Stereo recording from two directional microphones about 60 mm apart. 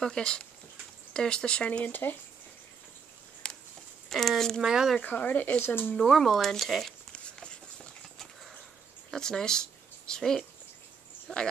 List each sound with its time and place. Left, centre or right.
0.0 s speech: centre
1.9 s speech: left
3.4 s a sound: centre
4.1 s speech: centre
4.6 s speech: centre
5.0 s speech: left
5.9 s speech: centre
7.1 s horse: centre
9.1 s speech: centre